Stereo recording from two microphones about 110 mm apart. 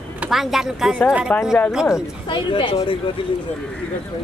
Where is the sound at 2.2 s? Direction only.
50° left (ahead or behind).